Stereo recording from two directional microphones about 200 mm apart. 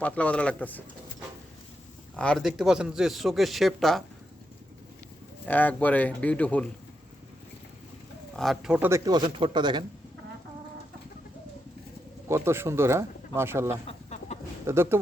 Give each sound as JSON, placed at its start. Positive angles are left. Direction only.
{"t": 0.0, "sound": "speech", "side_deg": 5}
{"t": 2.1, "sound": "speech", "side_deg": 5}
{"t": 5.5, "sound": "speech", "side_deg": 10}
{"t": 8.4, "sound": "speech", "side_deg": 0}
{"t": 12.3, "sound": "speech", "side_deg": -15}
{"t": 13.8, "sound": "chicken", "side_deg": 35}
{"t": 14.7, "sound": "speech", "side_deg": -10}